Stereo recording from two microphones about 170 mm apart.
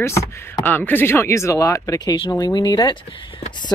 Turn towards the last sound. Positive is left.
turn(degrees=30)  # may be behind; listen again after turning